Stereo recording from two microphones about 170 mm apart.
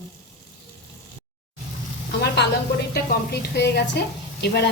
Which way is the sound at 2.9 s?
75° left (ahead or behind).